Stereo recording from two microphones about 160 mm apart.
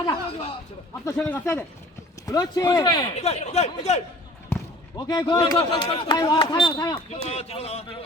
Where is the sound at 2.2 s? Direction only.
25° left (ahead or behind).